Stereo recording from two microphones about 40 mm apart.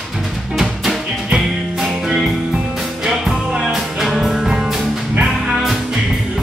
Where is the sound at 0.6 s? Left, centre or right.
Centre.